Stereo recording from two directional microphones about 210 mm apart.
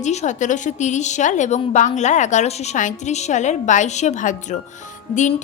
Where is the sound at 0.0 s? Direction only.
35° left (ahead or behind).